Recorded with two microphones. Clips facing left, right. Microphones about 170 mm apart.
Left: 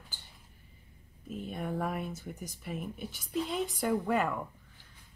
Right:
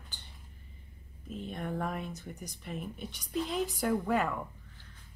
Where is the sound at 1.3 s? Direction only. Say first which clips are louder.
Left 1 dB; 5° left (ahead or behind).